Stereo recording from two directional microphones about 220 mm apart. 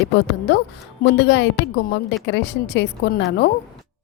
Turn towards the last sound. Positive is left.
turn(degrees=50)  # may be behind; listen again after turning